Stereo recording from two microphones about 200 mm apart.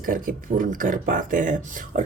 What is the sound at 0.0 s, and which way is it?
A woman's voice, 45° right (ahead or behind).